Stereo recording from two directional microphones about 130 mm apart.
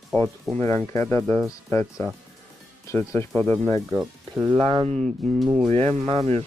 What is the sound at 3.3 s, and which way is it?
Speech, 10° left (ahead or behind).